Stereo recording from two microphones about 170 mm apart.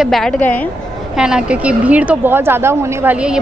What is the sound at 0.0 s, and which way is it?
Speech, centre (ahead or behind).